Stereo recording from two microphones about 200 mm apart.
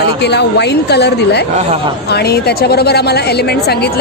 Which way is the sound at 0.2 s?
55° left (ahead or behind).